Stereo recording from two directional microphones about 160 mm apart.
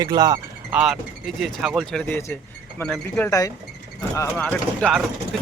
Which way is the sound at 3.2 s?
20° left (ahead or behind).